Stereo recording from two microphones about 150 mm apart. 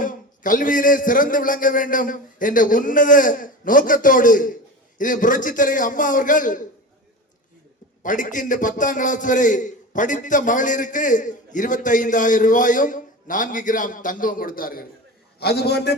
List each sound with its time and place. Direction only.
0.0 s a man's voice: 65° left (ahead or behind)
8.0 s a man's voice: 60° left (ahead or behind); by 14.8 s 75° left (ahead or behind)
15.4 s a man's voice: 90° left